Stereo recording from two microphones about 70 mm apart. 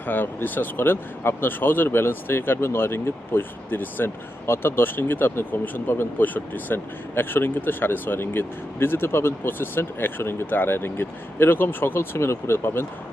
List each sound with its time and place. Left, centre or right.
0.0 s speech: left